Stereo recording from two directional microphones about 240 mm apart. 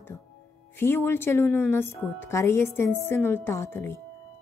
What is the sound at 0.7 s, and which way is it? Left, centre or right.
Speech, centre.